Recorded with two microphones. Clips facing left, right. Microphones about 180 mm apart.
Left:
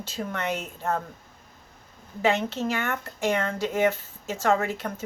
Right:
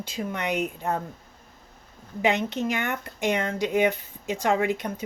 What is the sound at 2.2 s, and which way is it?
Speech, 15° right (ahead or behind).